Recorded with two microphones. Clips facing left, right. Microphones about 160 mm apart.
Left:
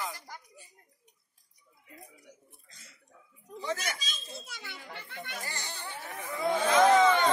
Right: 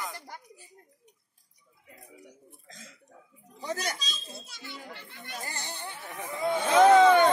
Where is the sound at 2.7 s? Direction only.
90° right.